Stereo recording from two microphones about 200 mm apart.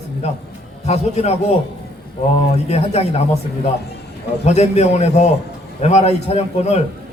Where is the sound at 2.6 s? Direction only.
30° left (ahead or behind).